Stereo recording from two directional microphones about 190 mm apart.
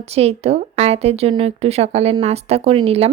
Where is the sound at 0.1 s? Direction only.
35° right (ahead or behind).